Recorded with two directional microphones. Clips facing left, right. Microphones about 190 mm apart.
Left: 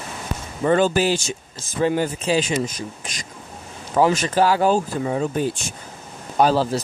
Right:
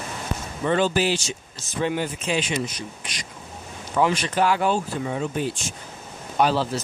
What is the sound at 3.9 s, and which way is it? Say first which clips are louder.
Speech: left 4 dB; 40° left (ahead or behind).